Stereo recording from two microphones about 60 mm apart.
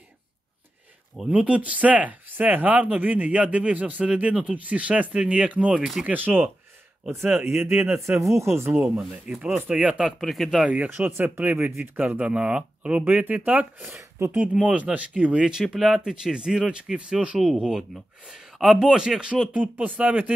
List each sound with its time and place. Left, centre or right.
1.3 s speech: right
5.8 s a man's voice: centre
6.0 s speech: right
8.2 s speech: right
8.9 s a man's voice: centre
10.2 s speech: centre
10.6 s speech: right
13.8 s speech: right
14.3 s speech: centre
15.4 s a man's voice: centre
17.4 s a man's voice: centre
19.5 s speech: right